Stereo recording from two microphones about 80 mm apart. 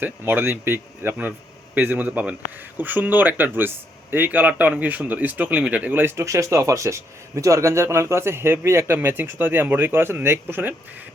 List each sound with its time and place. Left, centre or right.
0.0 s speech: right
6.2 s speech: right